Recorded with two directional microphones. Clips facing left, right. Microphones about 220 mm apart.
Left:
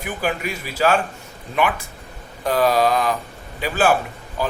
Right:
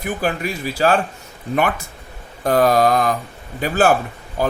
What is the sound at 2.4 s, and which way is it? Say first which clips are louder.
Speech: right 3 dB; 45° right (ahead or behind).